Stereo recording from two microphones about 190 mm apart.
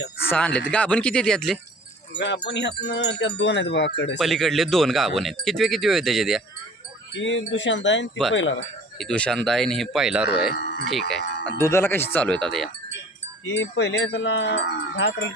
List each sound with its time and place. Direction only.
0.3 s speech: 5° left (ahead or behind)
2.1 s wind chime: 65° left (ahead or behind)
4.2 s speech: centre (ahead or behind)
7.1 s wind chime: 75° left (ahead or behind)
9.0 s speech: 5° left (ahead or behind)
10.5 s speech: 60° left (ahead or behind)
10.8 s speech: centre (ahead or behind)
11.6 s speech: 15° left (ahead or behind)
13.4 s wind chime: 75° left (ahead or behind)